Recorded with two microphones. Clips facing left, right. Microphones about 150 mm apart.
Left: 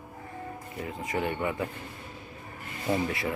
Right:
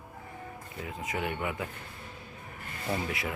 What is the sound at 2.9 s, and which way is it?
Speech, 20° left (ahead or behind).